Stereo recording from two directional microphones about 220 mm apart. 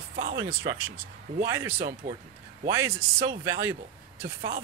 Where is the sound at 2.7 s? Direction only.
15° right (ahead or behind).